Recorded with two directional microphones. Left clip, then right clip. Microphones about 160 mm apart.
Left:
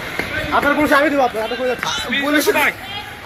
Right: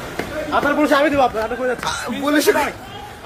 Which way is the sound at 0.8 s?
20° left (ahead or behind).